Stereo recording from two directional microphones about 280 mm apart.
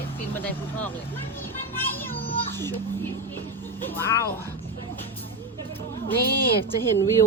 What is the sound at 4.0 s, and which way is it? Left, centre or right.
Speech, centre.